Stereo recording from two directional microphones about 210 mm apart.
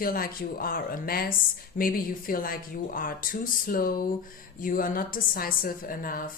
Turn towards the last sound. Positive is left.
turn(degrees=40)  # may be behind; listen again after turning